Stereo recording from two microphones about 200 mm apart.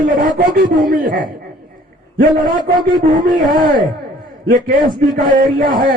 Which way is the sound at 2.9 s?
45° right (ahead or behind).